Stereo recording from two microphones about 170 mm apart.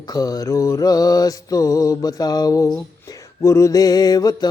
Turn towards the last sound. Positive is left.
turn(degrees=20)  # may be behind; listen again after turning